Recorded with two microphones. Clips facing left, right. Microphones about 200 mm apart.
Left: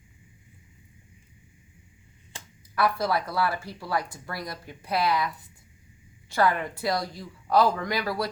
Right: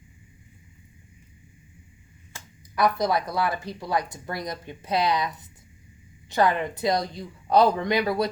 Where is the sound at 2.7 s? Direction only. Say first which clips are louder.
Right 2 dB; 20° right (ahead or behind).